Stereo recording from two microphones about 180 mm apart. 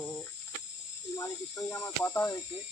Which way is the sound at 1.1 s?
15° left (ahead or behind).